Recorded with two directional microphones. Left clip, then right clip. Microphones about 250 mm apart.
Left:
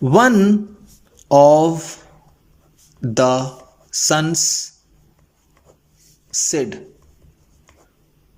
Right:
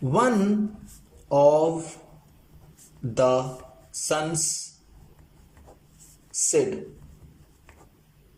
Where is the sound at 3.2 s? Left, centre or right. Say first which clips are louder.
Left 5 dB; left.